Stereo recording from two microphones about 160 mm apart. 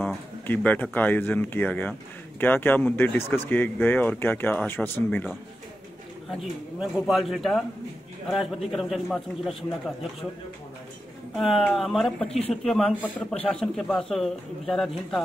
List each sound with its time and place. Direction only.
0.0 s speech: 10° left (ahead or behind)
6.8 s speech: centre (ahead or behind)
11.3 s speech: centre (ahead or behind)
12.3 s speech: 40° left (ahead or behind)
12.6 s speech: 5° left (ahead or behind)